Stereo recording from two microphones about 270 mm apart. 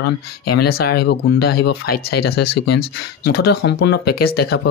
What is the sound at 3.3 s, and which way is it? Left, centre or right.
Speech, left.